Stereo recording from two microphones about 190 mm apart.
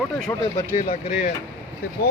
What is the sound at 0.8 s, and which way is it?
Speech, 45° left (ahead or behind).